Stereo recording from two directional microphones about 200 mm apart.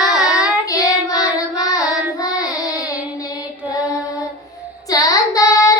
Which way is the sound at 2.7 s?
20° left (ahead or behind).